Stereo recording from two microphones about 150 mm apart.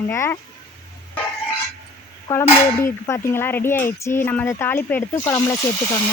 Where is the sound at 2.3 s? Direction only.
15° left (ahead or behind).